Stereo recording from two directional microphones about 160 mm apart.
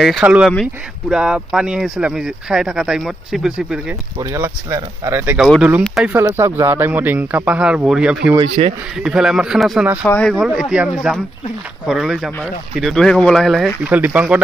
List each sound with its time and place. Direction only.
0.0 s speech: 5° right (ahead or behind)
4.2 s a man's voice: 15° right (ahead or behind)
8.4 s speech: 35° right (ahead or behind)
9.0 s speech: 5° right (ahead or behind)
10.0 s speech: 10° left (ahead or behind)
10.3 s speech: centre (ahead or behind)